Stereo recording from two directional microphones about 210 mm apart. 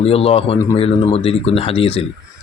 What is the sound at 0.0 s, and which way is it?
Speech, 30° left (ahead or behind).